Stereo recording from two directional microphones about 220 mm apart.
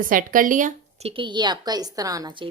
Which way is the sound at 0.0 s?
40° right (ahead or behind).